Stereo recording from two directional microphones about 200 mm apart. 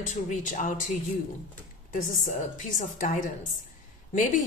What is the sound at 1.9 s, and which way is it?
Speech, 40° left (ahead or behind).